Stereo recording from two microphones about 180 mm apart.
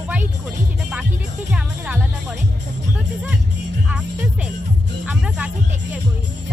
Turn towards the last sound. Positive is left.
turn(degrees=-5)  # may be behind; listen again after turning